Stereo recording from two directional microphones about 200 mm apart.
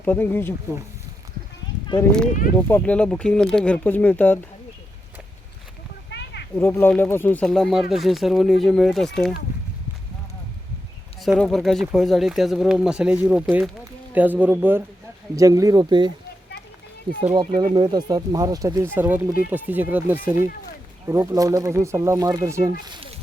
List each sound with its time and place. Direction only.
0.0 s speech: 10° left (ahead or behind)
2.0 s speech: 5° left (ahead or behind)
6.1 s a sound: 60° left (ahead or behind)
6.6 s speech: 10° left (ahead or behind)
11.2 s speech: centre (ahead or behind); by 16.1 s 20° right (ahead or behind)
17.2 s speech: 25° right (ahead or behind)